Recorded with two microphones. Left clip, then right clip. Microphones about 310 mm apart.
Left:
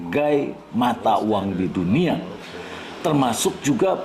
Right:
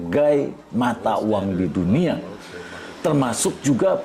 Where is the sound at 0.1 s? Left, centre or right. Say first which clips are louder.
Right 2 dB; right.